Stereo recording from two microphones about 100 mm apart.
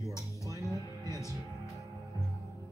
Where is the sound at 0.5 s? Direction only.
30° left (ahead or behind).